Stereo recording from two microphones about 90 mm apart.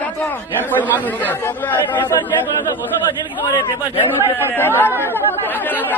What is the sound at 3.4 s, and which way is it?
Speech, 60° left (ahead or behind).